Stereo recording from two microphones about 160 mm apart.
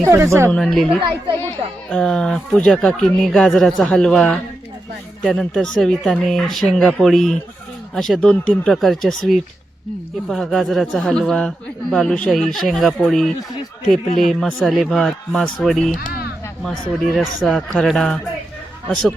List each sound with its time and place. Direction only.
0.0 s speech: 15° right (ahead or behind)
0.5 s a man's voice: centre (ahead or behind)
16.0 s music: 70° left (ahead or behind)
16.6 s a man's voice: centre (ahead or behind)